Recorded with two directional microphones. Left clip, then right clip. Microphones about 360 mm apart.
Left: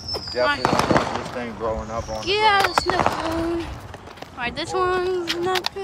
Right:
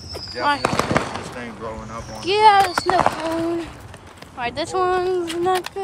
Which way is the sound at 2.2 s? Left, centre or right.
Centre.